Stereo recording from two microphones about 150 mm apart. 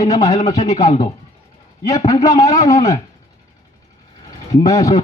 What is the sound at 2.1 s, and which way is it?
Speech, 25° left (ahead or behind).